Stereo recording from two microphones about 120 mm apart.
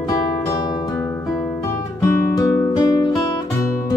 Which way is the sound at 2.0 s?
25° left (ahead or behind).